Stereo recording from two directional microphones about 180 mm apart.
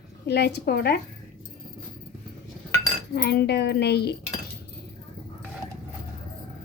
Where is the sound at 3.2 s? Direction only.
65° left (ahead or behind).